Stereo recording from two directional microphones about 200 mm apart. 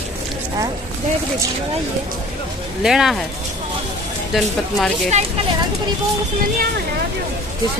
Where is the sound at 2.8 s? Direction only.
Centre (ahead or behind).